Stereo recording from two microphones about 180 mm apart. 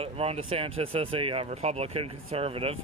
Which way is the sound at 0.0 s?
35° right (ahead or behind).